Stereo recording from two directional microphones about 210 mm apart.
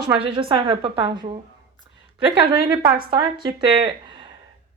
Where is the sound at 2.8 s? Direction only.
20° right (ahead or behind).